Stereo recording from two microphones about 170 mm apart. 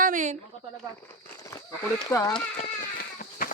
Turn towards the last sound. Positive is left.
turn(degrees=60)  # may be behind; listen again after turning